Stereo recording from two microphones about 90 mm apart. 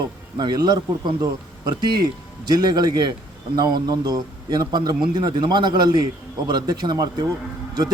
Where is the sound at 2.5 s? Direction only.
50° right (ahead or behind).